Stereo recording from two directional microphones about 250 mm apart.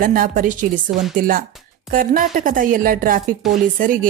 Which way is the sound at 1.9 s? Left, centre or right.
Right.